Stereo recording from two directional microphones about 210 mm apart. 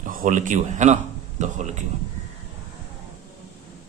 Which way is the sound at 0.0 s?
40° right (ahead or behind).